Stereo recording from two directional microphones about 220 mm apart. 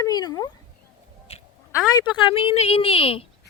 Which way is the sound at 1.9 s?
20° left (ahead or behind).